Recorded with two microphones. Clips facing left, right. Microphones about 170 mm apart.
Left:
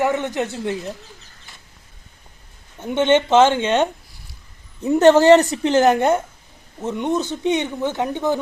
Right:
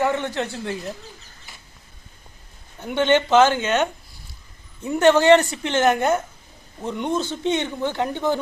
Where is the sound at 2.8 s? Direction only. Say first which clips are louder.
Left 2 dB; 25° left (ahead or behind).